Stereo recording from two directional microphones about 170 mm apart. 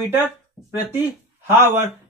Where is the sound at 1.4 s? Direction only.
15° right (ahead or behind).